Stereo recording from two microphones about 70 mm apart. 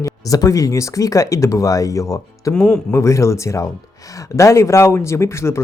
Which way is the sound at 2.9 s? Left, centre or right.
Left.